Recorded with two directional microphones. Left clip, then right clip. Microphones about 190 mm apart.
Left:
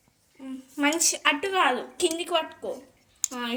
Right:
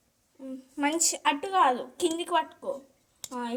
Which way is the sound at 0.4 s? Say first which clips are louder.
Left 4 dB; 35° right (ahead or behind).